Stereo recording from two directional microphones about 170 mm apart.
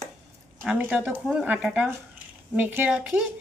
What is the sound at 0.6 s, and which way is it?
Speech, 5° right (ahead or behind).